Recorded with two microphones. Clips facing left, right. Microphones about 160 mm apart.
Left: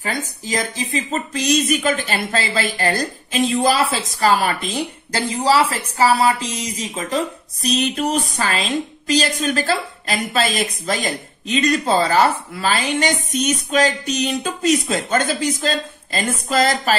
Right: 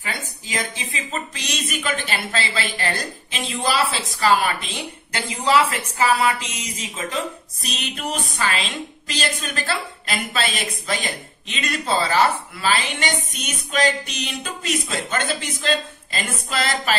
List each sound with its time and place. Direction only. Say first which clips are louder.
0.0 s a woman's voice: left 6 dB; 40° left (ahead or behind)